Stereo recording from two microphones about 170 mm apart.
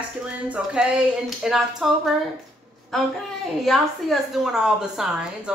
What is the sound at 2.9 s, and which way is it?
A woman's voice, centre (ahead or behind).